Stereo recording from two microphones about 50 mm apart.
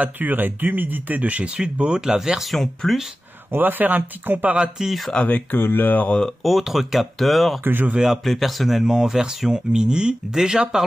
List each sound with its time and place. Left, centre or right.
0.0 s speech: right; by 2.4 s centre
2.5 s speech: centre
3.5 s speech: right
4.6 s speech: centre
5.1 s speech: left
5.6 s speech: left
6.4 s speech: centre
7.6 s speech: right
8.3 s speech: centre